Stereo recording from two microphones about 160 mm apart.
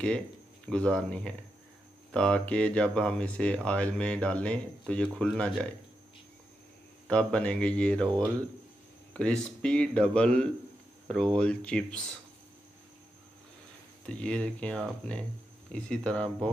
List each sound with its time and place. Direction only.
0.7 s speech: 5° left (ahead or behind)
7.1 s speech: 5° left (ahead or behind)
9.1 s speech: 5° left (ahead or behind)
14.0 s speech: 5° left (ahead or behind)